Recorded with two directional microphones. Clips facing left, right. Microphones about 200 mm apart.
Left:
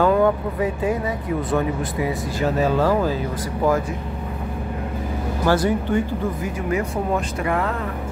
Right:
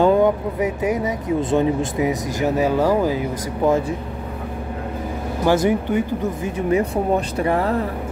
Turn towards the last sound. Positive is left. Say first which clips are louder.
# right 4 dB
turn(degrees=-35)  # may be behind; listen again after turning